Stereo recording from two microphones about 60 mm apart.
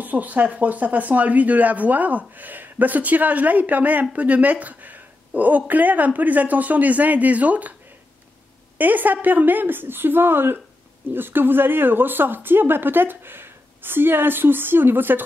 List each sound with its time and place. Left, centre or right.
0.0 s speech: right
8.7 s speech: right